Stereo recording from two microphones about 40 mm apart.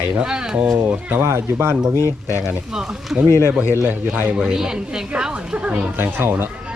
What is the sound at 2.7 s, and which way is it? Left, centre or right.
Speech, centre.